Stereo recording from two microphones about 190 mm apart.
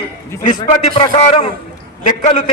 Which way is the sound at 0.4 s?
30° left (ahead or behind).